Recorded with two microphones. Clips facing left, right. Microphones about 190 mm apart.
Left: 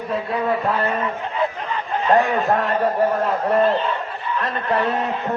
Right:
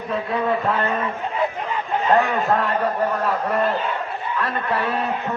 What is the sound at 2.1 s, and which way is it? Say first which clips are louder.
A man's voice: left 2 dB; 15° left (ahead or behind).